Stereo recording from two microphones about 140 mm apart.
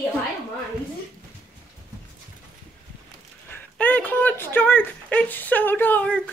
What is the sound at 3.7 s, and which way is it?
Speech, 10° left (ahead or behind).